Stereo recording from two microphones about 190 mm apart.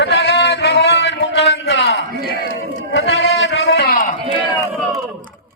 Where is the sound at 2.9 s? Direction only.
90° left.